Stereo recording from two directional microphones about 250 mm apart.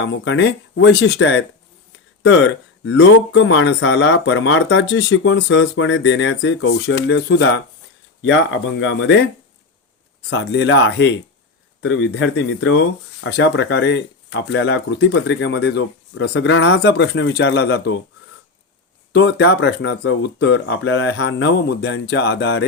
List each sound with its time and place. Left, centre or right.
0.0 s speech: left
10.2 s speech: left
19.1 s speech: left